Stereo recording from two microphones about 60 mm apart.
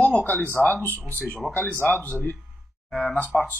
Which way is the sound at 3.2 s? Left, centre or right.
Left.